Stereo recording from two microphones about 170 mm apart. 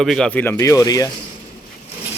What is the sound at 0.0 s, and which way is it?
Speech, 5° left (ahead or behind).